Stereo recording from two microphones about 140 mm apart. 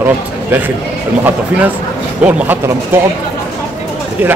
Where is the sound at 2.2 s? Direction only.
10° right (ahead or behind).